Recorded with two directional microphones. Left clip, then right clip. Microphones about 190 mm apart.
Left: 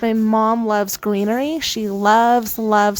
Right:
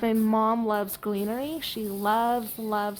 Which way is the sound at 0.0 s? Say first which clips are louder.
Left 7 dB; 25° left (ahead or behind).